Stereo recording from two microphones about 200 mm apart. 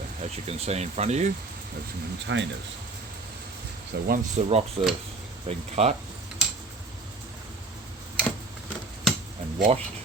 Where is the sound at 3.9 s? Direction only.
60° right (ahead or behind).